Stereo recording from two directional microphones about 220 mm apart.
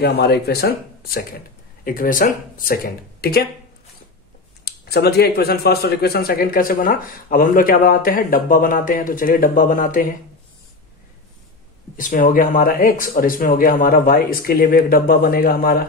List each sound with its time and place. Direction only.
0.0 s speech: 45° left (ahead or behind)
4.6 s speech: 45° left (ahead or behind)
12.0 s speech: 35° left (ahead or behind)